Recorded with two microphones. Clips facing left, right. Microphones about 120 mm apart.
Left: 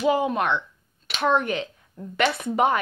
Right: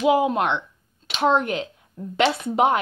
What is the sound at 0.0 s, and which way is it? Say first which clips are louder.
A woman's voice: right 3 dB; 15° right (ahead or behind).